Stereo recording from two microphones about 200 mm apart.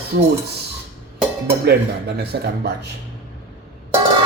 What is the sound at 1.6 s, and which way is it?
Speech, 55° right (ahead or behind).